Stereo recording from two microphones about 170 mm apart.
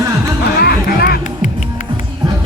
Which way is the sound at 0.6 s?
65° left (ahead or behind).